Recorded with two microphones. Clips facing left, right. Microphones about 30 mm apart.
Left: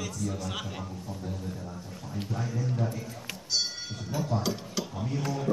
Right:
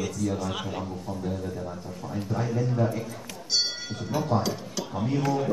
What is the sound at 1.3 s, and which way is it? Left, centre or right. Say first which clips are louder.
A man's voice: right 5 dB; right.